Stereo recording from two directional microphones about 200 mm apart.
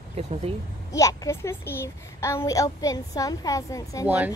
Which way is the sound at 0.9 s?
15° left (ahead or behind).